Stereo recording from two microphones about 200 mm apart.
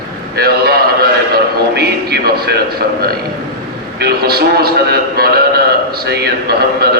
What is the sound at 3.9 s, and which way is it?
A man's voice, 50° right (ahead or behind).